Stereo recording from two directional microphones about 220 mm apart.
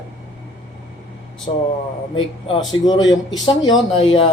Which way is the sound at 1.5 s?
25° left (ahead or behind).